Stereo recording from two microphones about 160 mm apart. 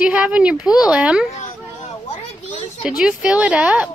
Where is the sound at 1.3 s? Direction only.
45° left (ahead or behind).